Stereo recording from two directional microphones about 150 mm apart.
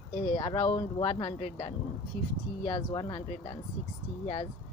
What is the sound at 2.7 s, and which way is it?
Speech, 30° left (ahead or behind).